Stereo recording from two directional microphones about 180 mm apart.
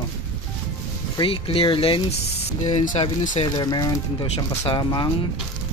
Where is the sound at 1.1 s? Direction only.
30° left (ahead or behind).